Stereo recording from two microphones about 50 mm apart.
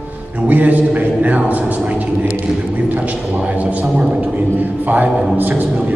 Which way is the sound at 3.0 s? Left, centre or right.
Right.